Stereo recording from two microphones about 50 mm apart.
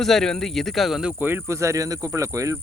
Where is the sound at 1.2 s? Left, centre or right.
Right.